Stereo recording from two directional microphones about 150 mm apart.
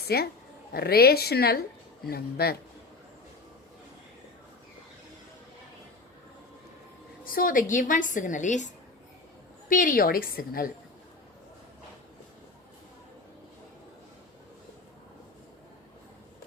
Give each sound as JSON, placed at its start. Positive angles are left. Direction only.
{"t": 0.1, "sound": "a woman's voice", "side_deg": 90}
{"t": 7.3, "sound": "a woman's voice", "side_deg": 70}
{"t": 9.6, "sound": "a woman's voice", "side_deg": 65}